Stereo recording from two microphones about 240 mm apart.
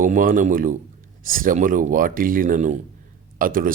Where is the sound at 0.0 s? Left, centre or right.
Right.